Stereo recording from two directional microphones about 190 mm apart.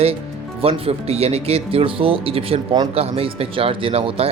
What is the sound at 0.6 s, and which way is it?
Speech, 30° right (ahead or behind).